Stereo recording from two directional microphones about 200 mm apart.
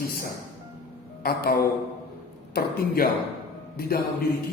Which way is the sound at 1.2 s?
50° left (ahead or behind).